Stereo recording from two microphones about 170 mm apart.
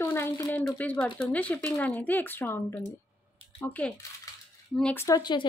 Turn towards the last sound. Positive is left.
turn(degrees=25)  # may be behind; listen again after turning